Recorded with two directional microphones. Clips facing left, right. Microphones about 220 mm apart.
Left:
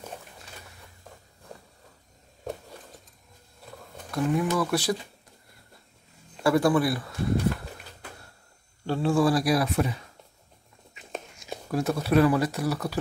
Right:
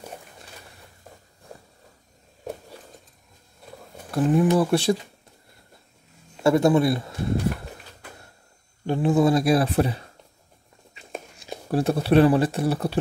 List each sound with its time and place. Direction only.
4.1 s speech: 30° right (ahead or behind)
6.4 s speech: 25° right (ahead or behind)
8.8 s speech: 20° right (ahead or behind)
11.0 s whispering: 35° right (ahead or behind)
11.3 s speech: 30° right (ahead or behind)